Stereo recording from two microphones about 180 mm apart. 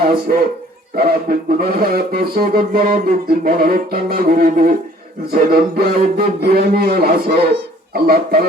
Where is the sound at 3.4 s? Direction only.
55° right (ahead or behind).